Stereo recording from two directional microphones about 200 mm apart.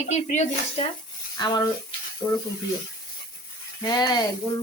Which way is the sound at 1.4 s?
20° left (ahead or behind).